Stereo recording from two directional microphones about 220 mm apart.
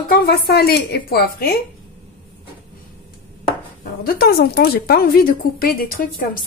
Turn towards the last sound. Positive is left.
turn(degrees=40)  # may be behind; listen again after turning